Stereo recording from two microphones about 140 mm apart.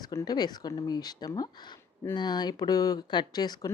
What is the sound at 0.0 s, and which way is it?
Speech, 25° left (ahead or behind).